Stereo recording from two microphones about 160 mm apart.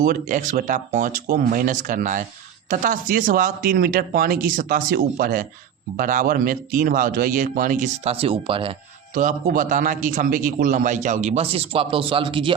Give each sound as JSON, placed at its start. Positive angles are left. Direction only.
{"t": 0.0, "sound": "speech", "side_deg": -55}
{"t": 9.1, "sound": "a man's voice", "side_deg": -55}